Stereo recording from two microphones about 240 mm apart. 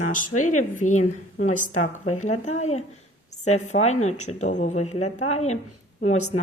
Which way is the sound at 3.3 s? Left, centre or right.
Left.